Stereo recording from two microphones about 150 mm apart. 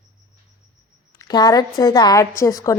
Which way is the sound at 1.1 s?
25° left (ahead or behind).